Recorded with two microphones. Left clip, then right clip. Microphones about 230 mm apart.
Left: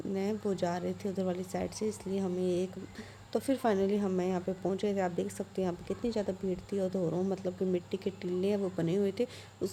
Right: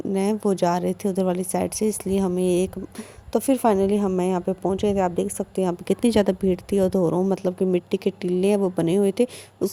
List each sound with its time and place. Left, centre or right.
0.1 s a woman's voice: right
5.9 s a woman's voice: right